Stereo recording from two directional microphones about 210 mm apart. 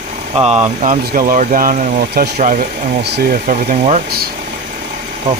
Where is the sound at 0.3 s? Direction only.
30° right (ahead or behind).